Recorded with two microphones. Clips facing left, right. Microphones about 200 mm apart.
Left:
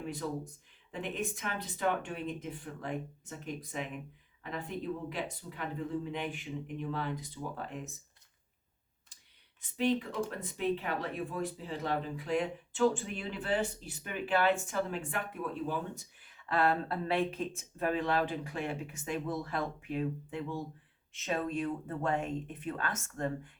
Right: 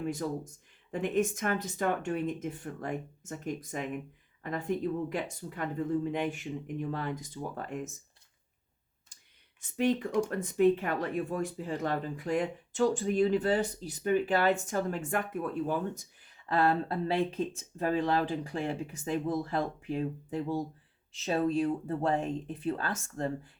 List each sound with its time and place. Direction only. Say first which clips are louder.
0.9 s speech: right 8 dB; 45° right (ahead or behind)
9.6 s speech: right 2 dB; 45° right (ahead or behind)
16.6 s speech: right 3 dB; 30° right (ahead or behind)